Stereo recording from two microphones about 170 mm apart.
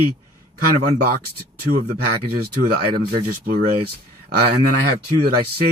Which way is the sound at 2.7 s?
65° right (ahead or behind).